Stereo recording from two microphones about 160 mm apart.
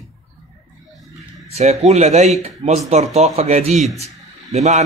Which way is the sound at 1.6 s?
45° right (ahead or behind).